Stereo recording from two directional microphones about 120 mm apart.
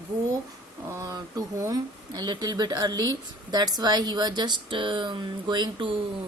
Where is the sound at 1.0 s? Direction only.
30° right (ahead or behind).